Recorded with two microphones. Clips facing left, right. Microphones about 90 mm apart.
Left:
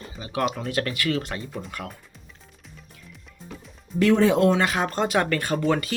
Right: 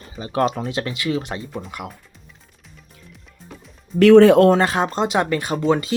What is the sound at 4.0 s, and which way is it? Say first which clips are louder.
Speech: right 9 dB; 70° right (ahead or behind).